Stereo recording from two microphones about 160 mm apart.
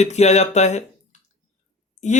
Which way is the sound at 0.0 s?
45° left (ahead or behind).